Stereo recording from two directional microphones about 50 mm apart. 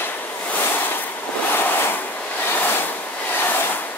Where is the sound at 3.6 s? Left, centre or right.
Left.